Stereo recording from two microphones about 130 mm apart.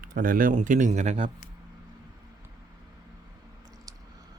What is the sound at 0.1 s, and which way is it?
Speech, 90° right.